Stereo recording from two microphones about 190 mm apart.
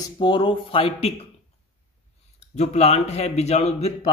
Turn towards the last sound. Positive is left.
turn(degrees=35)  # may be behind; listen again after turning